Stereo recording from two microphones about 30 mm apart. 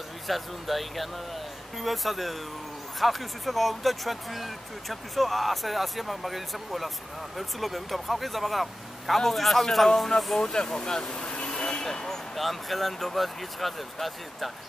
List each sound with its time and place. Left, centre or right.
0.3 s speech: centre
10.4 s speech: left
11.4 s vehicle: left
12.4 s speech: centre